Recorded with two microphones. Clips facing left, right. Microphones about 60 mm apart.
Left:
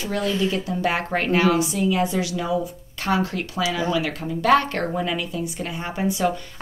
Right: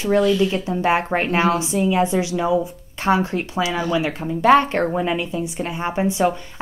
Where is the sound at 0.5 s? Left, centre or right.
Right.